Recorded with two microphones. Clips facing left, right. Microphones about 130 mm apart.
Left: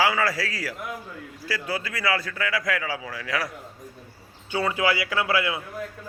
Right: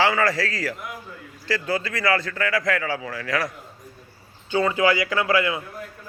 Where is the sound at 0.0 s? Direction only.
10° left (ahead or behind).